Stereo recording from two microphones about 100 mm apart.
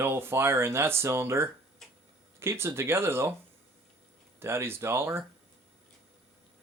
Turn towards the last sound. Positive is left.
turn(degrees=-25)  # may be behind; listen again after turning